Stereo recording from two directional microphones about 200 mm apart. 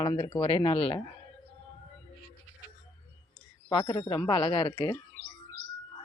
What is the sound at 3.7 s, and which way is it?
A man's voice, 25° left (ahead or behind).